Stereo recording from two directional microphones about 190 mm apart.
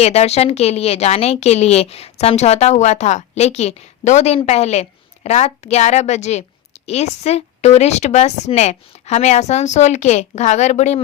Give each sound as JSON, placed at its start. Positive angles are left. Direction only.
{"t": 0.0, "sound": "speech", "side_deg": 35}